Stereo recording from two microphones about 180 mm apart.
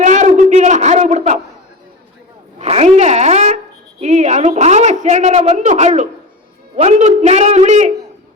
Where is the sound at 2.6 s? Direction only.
35° right (ahead or behind).